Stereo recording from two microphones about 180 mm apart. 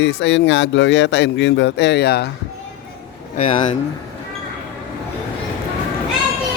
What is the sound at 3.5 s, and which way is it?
Speech, 45° left (ahead or behind).